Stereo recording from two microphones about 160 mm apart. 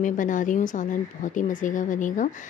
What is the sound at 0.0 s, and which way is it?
Speech, 55° left (ahead or behind).